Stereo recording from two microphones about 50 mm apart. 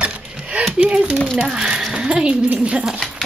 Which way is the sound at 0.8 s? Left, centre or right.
Right.